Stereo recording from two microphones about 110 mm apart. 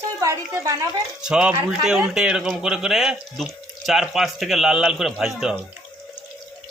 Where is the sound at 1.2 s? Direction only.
5° right (ahead or behind).